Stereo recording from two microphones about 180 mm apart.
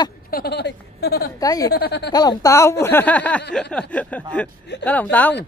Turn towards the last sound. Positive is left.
turn(degrees=10)  # may be behind; listen again after turning